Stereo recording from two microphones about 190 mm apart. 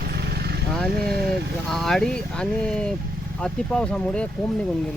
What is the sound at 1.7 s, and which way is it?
Speech, centre (ahead or behind).